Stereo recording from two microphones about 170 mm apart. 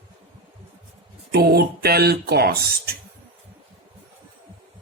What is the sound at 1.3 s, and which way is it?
Speech, 65° right (ahead or behind).